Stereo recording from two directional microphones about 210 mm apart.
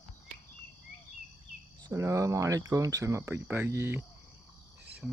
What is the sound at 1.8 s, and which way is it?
Speech, 15° right (ahead or behind).